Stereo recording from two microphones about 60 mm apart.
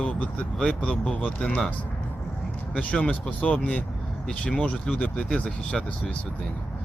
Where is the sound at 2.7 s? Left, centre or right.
Centre.